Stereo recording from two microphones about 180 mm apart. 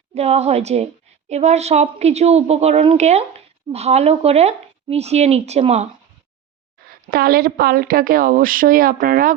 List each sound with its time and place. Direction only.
0.1 s speech: 35° right (ahead or behind)
7.1 s a woman's voice: 55° right (ahead or behind)